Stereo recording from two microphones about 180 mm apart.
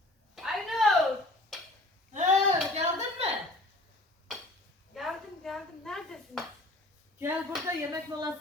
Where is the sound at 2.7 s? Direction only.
35° right (ahead or behind).